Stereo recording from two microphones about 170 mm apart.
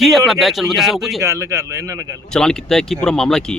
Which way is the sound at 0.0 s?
Centre (ahead or behind).